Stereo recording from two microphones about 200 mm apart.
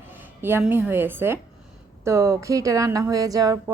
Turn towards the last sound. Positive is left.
turn(degrees=-15)  # may be behind; listen again after turning